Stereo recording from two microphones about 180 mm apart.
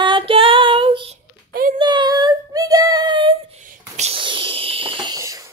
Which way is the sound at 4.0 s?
30° right (ahead or behind).